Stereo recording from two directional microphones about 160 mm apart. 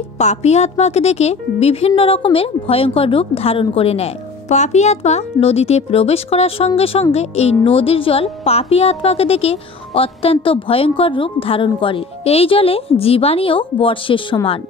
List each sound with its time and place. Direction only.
0.2 s a woman's voice: 45° left (ahead or behind)